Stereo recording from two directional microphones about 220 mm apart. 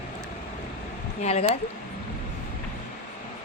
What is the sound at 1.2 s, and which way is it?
Speech, 30° left (ahead or behind).